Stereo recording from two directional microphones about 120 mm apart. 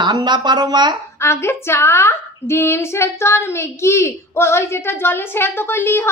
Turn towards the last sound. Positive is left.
turn(degrees=20)  # may be behind; listen again after turning